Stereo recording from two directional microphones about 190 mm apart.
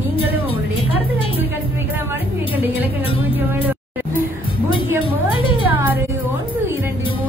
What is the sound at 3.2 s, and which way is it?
Speech, 10° right (ahead or behind).